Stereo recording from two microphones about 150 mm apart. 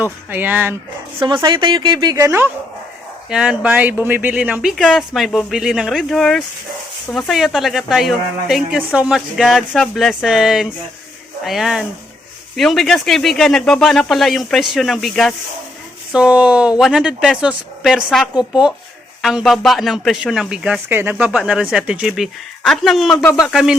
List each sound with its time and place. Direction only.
0.0 s speech: 15° right (ahead or behind)
1.2 s a woman's voice: 35° right (ahead or behind)
3.2 s a woman's voice: 5° right (ahead or behind)